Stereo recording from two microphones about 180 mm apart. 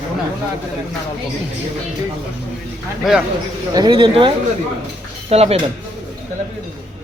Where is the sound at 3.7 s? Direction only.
25° right (ahead or behind).